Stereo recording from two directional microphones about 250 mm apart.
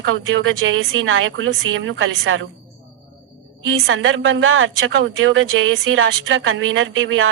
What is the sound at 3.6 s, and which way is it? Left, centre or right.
Speech, right.